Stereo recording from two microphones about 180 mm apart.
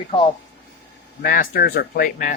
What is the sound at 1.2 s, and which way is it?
Speech, 55° left (ahead or behind).